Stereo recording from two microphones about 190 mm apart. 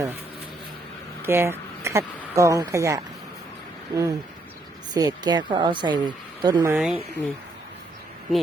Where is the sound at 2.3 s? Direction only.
15° right (ahead or behind).